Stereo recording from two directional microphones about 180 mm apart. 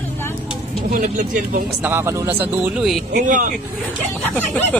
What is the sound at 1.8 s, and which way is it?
Speech, 15° right (ahead or behind).